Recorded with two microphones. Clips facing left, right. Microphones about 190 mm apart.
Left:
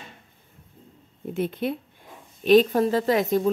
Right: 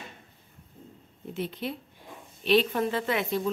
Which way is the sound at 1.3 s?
50° left (ahead or behind).